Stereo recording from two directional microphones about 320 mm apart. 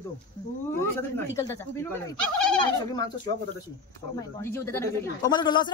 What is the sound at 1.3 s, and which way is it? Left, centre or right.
Speech, centre.